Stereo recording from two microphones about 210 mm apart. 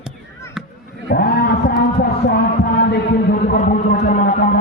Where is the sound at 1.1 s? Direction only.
50° left (ahead or behind).